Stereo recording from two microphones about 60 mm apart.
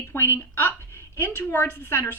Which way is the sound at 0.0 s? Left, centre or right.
Left.